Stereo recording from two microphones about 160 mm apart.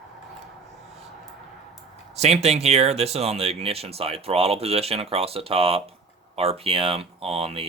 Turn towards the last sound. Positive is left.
turn(degrees=-35)  # may be behind; listen again after turning